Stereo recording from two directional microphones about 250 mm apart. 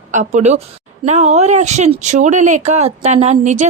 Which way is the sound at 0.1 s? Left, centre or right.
Right.